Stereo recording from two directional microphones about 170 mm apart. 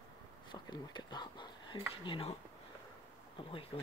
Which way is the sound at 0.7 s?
25° left (ahead or behind).